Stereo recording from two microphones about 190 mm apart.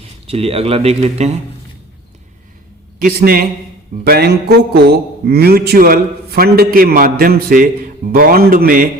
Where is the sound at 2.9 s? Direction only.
50° right (ahead or behind).